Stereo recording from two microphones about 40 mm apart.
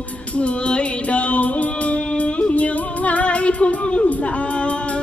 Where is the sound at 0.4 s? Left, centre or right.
Left.